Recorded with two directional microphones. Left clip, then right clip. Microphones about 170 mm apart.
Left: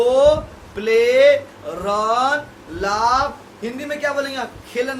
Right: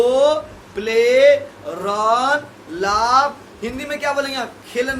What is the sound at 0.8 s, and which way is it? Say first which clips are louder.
Speech: even; 20° right (ahead or behind).